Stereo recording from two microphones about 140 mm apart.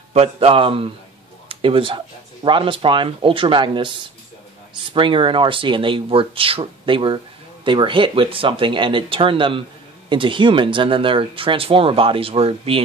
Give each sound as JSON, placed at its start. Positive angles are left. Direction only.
{"t": 0.1, "sound": "speech", "side_deg": -45}
{"t": 4.9, "sound": "speech", "side_deg": -35}